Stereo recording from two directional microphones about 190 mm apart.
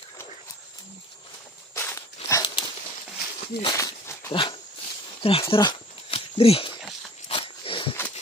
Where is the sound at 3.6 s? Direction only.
20° left (ahead or behind).